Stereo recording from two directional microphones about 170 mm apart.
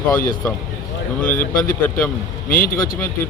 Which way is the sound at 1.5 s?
55° left (ahead or behind).